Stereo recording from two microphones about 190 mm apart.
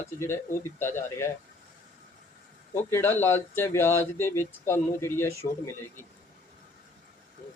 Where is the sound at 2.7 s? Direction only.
15° left (ahead or behind).